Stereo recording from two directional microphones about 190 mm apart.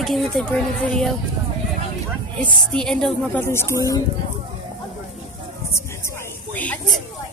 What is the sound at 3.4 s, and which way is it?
Speech, 15° left (ahead or behind).